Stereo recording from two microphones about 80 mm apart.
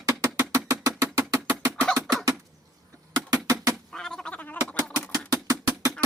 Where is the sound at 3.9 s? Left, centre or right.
Centre.